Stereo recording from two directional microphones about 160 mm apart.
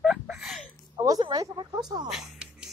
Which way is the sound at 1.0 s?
25° right (ahead or behind).